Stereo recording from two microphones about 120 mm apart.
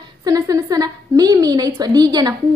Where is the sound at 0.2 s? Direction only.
30° right (ahead or behind).